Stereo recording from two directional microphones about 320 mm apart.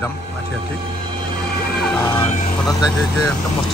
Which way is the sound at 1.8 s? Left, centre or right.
Centre.